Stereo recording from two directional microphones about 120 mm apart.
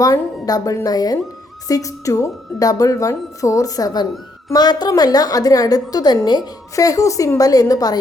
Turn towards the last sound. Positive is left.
turn(degrees=30)  # may be behind; listen again after turning